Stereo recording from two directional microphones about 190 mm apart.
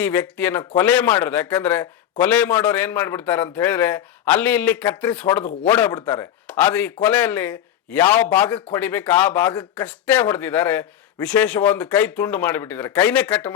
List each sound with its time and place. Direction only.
0.0 s speech: 10° left (ahead or behind)